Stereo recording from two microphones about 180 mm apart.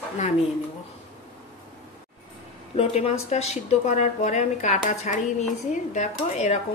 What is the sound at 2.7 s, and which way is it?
Speech, 35° left (ahead or behind).